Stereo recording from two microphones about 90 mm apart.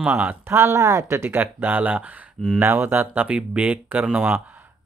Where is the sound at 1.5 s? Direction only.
20° right (ahead or behind).